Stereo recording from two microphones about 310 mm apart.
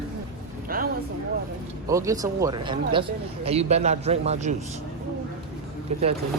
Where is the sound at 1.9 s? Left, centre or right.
Centre.